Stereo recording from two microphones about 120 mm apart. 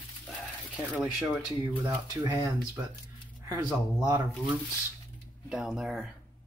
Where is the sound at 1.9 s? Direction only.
20° right (ahead or behind).